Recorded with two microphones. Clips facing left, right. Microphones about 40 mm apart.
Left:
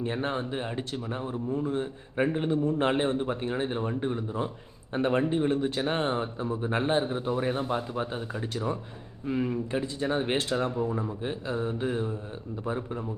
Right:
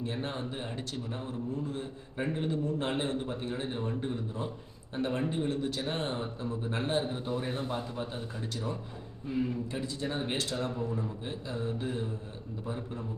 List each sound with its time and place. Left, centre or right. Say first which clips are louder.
0.0 s a man's voice: left 6 dB; left
7.9 s a man's voice: left 5 dB; left